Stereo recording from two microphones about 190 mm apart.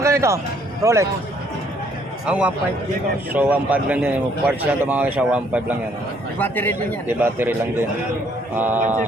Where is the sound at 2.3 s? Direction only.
5° right (ahead or behind).